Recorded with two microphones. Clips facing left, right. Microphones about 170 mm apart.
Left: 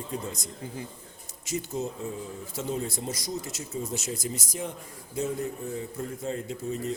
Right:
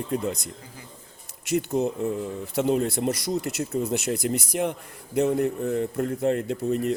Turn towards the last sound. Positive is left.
turn(degrees=-65)  # may be behind; listen again after turning